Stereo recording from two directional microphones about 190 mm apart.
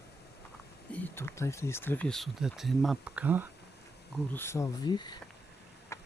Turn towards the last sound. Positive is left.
turn(degrees=15)  # may be behind; listen again after turning